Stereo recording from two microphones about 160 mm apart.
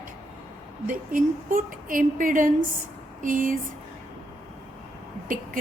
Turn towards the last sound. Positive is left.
turn(degrees=-60)  # may be behind; listen again after turning